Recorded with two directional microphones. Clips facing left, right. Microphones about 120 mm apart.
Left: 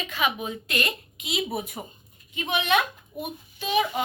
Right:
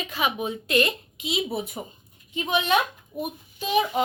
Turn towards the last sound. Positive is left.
turn(degrees=-35)  # may be behind; listen again after turning